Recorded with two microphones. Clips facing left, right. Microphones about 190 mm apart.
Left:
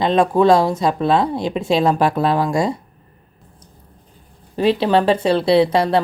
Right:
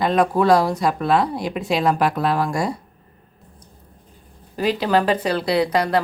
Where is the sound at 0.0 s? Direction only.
25° left (ahead or behind).